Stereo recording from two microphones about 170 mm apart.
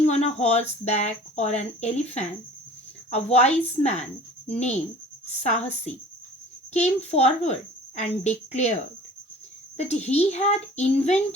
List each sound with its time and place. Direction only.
0.0 s speech: 40° left (ahead or behind)
6.7 s speech: 40° left (ahead or behind)